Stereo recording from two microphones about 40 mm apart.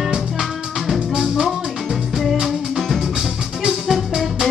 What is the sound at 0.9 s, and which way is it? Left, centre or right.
Music, centre.